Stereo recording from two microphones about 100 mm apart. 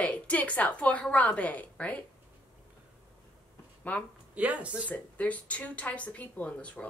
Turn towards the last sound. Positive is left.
turn(degrees=10)  # may be behind; listen again after turning